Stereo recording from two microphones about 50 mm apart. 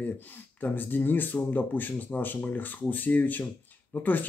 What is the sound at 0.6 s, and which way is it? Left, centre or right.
Speech, left.